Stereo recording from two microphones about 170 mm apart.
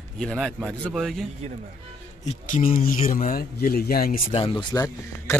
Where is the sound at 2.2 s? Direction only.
50° left (ahead or behind).